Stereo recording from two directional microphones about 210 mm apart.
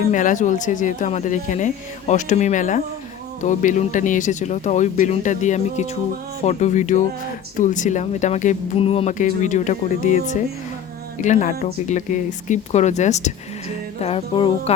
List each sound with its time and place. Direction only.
0.1 s speech: 35° left (ahead or behind)
14.0 s music: 25° left (ahead or behind)